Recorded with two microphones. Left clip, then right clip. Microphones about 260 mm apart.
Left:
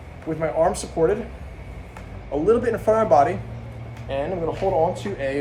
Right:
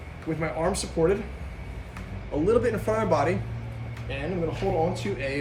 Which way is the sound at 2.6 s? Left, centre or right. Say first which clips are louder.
Left 3 dB; left.